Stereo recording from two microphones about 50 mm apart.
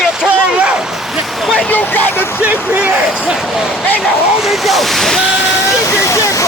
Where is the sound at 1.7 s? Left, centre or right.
Left.